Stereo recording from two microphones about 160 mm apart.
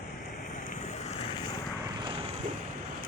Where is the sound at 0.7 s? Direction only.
45° left (ahead or behind).